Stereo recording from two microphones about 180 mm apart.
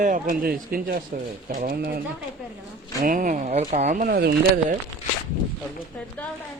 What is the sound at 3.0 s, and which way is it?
Speech, 45° right (ahead or behind).